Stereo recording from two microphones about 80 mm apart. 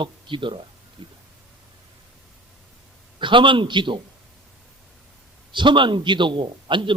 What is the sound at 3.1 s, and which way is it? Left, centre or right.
Speech, right.